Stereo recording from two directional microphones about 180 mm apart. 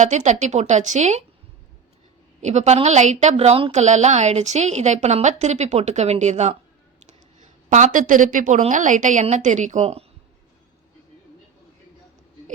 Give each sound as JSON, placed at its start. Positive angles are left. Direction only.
{"t": 0.0, "sound": "a woman's voice", "side_deg": -40}
{"t": 2.4, "sound": "a woman's voice", "side_deg": -40}
{"t": 7.9, "sound": "a woman's voice", "side_deg": -45}